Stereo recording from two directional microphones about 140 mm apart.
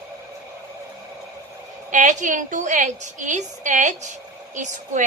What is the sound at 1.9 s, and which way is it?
A woman's voice, 65° right (ahead or behind).